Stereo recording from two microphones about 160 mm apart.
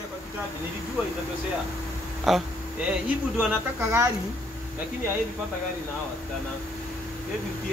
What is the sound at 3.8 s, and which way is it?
Speech, 15° right (ahead or behind).